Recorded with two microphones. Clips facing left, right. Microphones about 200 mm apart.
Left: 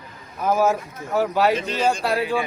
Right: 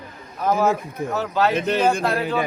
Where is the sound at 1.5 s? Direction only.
55° right (ahead or behind).